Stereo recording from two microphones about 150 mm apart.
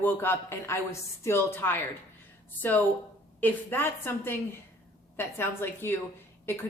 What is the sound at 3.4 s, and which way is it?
A woman's voice, 15° left (ahead or behind).